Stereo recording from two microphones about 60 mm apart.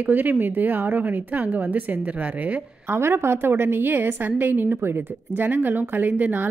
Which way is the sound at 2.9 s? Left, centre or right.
Right.